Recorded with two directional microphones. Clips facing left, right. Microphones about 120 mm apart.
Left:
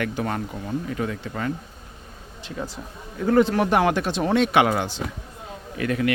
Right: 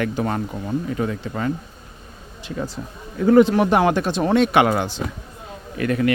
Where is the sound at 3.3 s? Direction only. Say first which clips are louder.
Right 4 dB; 15° right (ahead or behind).